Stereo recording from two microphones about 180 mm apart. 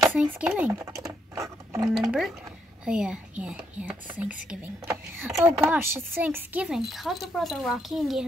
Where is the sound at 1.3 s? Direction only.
15° right (ahead or behind).